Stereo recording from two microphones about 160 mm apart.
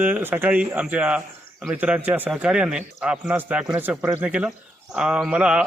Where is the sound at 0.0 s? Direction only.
10° right (ahead or behind).